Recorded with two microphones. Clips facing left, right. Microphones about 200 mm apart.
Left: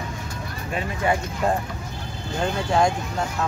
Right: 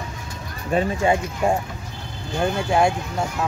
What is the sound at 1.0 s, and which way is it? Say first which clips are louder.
Speech: right 2 dB; 25° right (ahead or behind).